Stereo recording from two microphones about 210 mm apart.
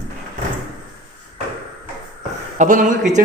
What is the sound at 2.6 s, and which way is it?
Speech, 35° right (ahead or behind).